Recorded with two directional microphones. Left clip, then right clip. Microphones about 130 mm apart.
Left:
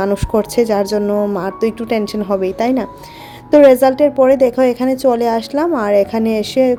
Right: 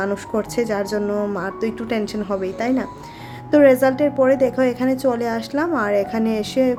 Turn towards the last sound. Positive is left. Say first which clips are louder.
# left 6 dB
turn(degrees=35)  # may be behind; listen again after turning